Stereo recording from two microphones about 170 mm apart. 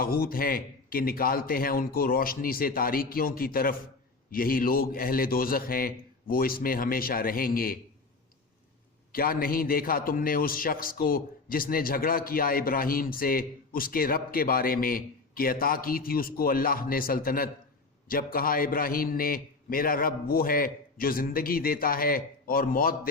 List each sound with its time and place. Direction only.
0.0 s a man's voice: 60° left (ahead or behind)
9.1 s a man's voice: 60° left (ahead or behind)